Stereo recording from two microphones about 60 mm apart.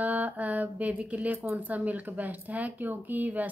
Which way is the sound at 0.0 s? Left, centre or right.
Right.